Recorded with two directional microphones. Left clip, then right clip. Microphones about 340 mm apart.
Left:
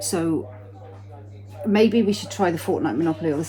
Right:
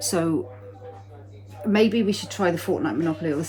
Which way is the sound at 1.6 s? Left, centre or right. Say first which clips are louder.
Left 2 dB; centre.